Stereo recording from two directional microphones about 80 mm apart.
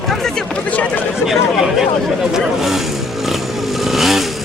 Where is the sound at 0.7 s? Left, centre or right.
Centre.